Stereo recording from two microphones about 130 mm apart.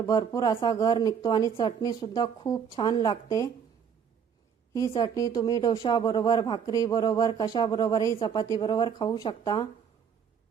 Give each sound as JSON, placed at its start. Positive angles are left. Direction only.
{"t": 0.1, "sound": "speech", "side_deg": 30}
{"t": 4.7, "sound": "a woman's voice", "side_deg": 25}